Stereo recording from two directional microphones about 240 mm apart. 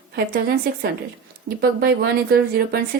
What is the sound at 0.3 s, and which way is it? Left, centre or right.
A woman's voice, right.